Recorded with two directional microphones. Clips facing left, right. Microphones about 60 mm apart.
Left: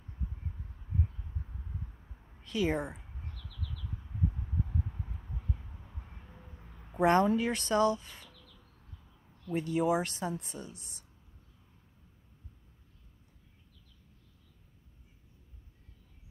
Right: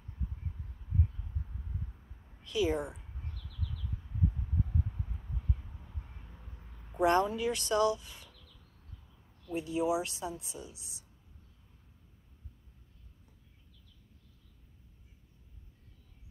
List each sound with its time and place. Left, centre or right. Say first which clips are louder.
2.4 s speech: even; left
7.0 s speech: left 2 dB; left
9.5 s speech: left 2 dB; left